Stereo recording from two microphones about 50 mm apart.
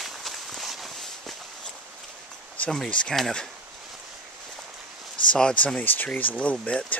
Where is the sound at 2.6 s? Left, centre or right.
Left.